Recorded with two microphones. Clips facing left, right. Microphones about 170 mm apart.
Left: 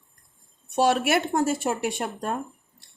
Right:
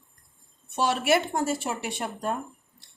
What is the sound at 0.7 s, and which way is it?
A woman's voice, 55° left (ahead or behind).